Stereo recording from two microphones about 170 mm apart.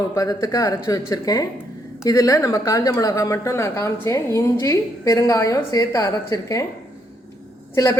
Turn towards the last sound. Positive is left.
turn(degrees=15)  # may be behind; listen again after turning